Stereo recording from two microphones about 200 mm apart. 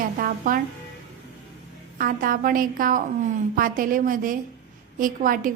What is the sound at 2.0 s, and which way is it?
A woman's voice, 45° right (ahead or behind).